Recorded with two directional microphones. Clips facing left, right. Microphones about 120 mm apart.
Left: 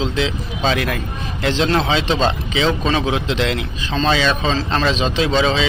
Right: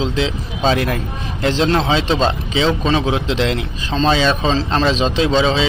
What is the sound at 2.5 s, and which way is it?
A man's voice, 25° right (ahead or behind).